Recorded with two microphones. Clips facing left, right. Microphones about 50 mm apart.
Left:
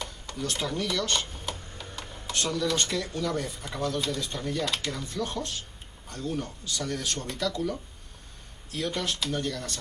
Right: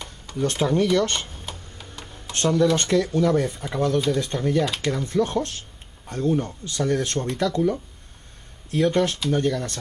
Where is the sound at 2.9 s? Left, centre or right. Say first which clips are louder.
Right 10 dB; right.